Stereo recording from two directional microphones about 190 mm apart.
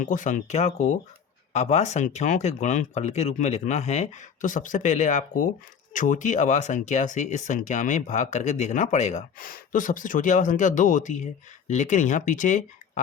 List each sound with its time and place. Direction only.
0.0 s speech: 40° left (ahead or behind)